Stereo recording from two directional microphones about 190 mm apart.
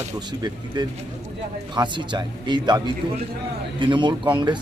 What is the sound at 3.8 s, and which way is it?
Speech, 25° right (ahead or behind).